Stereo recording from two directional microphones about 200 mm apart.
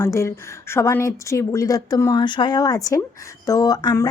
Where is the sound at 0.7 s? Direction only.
10° left (ahead or behind).